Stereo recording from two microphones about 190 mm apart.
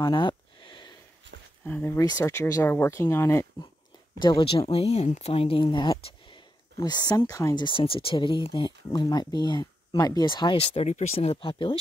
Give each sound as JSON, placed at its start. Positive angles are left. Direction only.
{"t": 0.0, "sound": "a sound", "side_deg": 25}
{"t": 1.6, "sound": "speech", "side_deg": 10}
{"t": 4.2, "sound": "speech", "side_deg": 25}